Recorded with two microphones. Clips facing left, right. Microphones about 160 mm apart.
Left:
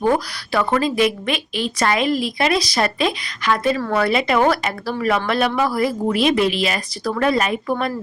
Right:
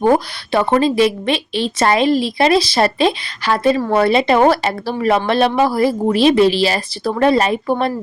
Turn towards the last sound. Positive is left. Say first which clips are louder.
# right 4 dB
turn(degrees=-30)  # may be behind; listen again after turning